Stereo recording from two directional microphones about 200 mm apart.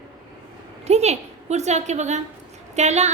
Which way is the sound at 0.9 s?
35° right (ahead or behind).